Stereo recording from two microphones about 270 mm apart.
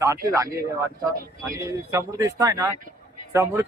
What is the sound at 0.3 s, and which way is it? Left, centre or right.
Speech, centre.